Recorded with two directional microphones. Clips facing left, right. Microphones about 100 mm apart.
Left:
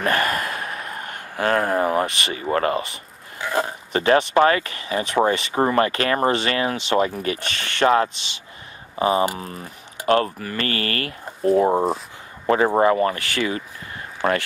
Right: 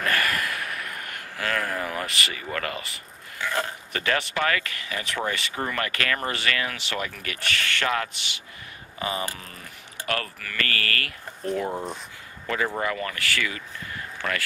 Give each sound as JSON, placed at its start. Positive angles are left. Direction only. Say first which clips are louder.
{"t": 0.0, "sound": "a sound", "louder": "left 4 dB", "side_deg": 25}
{"t": 2.5, "sound": "speech", "louder": "left 14 dB", "side_deg": 25}
{"t": 12.8, "sound": "speech", "louder": "left 10 dB", "side_deg": 30}